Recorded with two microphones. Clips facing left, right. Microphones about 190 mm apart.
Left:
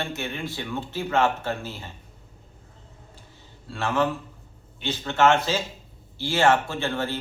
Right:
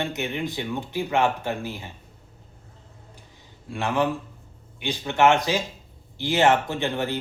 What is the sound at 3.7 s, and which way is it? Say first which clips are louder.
A man's voice: right 1 dB; 15° right (ahead or behind).